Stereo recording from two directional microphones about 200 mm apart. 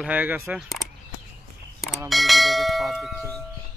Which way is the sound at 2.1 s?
Centre (ahead or behind).